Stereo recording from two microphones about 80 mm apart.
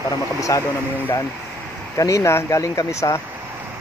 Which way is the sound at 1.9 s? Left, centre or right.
Left.